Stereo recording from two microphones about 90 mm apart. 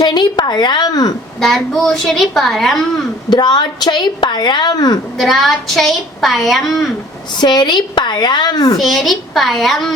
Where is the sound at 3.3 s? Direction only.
50° left (ahead or behind).